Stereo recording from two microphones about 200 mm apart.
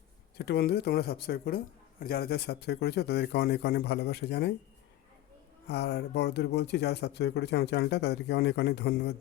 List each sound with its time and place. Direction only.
0.3 s speech: 55° left (ahead or behind)
5.6 s speech: 55° left (ahead or behind)